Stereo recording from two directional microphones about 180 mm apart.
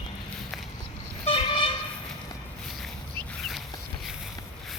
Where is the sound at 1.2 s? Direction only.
30° left (ahead or behind).